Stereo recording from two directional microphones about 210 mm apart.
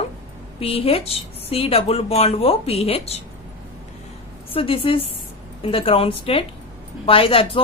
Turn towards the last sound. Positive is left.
turn(degrees=25)  # may be behind; listen again after turning